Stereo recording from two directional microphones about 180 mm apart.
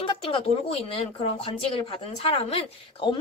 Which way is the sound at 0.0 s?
30° left (ahead or behind).